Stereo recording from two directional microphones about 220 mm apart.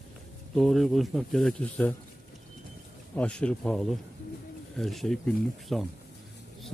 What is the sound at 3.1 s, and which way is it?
Speech, 5° left (ahead or behind).